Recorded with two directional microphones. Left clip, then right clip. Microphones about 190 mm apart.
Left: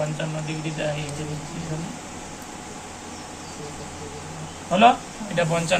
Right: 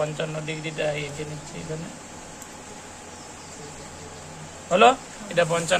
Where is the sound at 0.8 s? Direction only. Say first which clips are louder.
Right 1 dB; 65° right (ahead or behind).